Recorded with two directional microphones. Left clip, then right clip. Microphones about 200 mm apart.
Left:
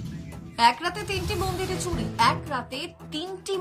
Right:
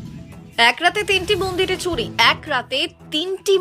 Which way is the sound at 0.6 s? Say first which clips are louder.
Right 6 dB; 15° right (ahead or behind).